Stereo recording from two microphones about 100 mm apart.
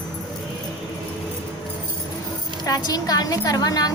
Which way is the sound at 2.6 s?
40° left (ahead or behind).